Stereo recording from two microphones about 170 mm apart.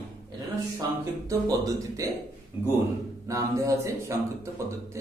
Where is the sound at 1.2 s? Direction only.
20° right (ahead or behind).